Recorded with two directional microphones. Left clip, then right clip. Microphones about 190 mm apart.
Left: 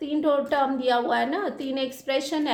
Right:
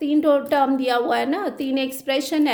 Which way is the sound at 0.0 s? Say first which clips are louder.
Right 5 dB; 40° right (ahead or behind).